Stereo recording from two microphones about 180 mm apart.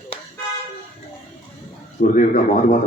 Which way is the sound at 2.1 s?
50° left (ahead or behind).